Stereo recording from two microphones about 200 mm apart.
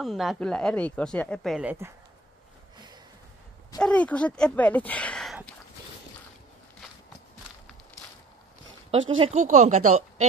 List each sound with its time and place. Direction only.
0.0 s speech: centre (ahead or behind)
3.8 s speech: 5° left (ahead or behind)
8.9 s speech: 75° right (ahead or behind)
9.2 s speech: 35° right (ahead or behind)